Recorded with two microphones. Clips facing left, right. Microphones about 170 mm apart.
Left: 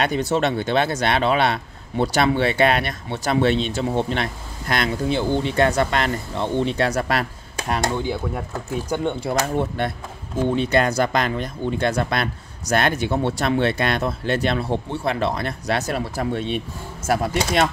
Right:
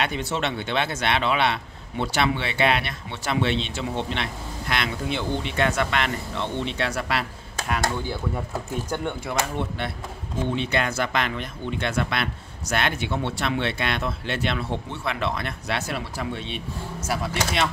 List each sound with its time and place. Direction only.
0.0 s speech: 40° left (ahead or behind)
7.8 s speech: 15° left (ahead or behind)
9.2 s speech: 35° left (ahead or behind)